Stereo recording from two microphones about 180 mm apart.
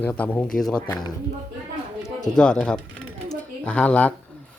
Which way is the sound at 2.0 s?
20° left (ahead or behind).